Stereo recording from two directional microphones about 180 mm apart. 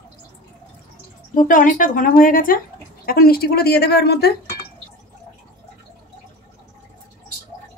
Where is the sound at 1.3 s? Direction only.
50° left (ahead or behind).